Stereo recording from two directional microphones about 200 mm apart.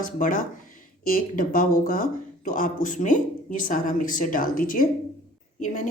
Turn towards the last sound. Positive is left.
turn(degrees=40)  # may be behind; listen again after turning